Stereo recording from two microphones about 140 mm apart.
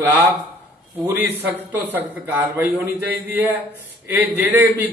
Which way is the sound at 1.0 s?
15° right (ahead or behind).